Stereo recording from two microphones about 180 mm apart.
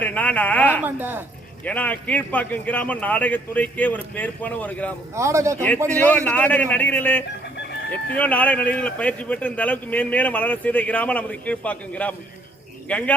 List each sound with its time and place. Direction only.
0.0 s speech: 10° left (ahead or behind)
0.9 s speech: 10° right (ahead or behind)
1.6 s speech: 10° left (ahead or behind)
5.1 s speech: 15° right (ahead or behind)
5.9 s speech: 10° left (ahead or behind)